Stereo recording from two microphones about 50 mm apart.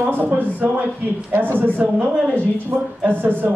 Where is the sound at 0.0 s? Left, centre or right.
Right.